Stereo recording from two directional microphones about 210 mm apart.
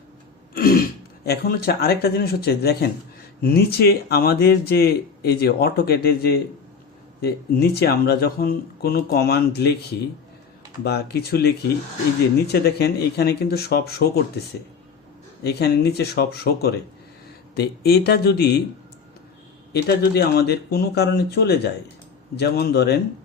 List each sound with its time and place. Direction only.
0.5 s speech: 45° left (ahead or behind)
10.8 s speech: 50° left (ahead or behind)
15.4 s speech: 50° left (ahead or behind)
19.7 s speech: 50° left (ahead or behind)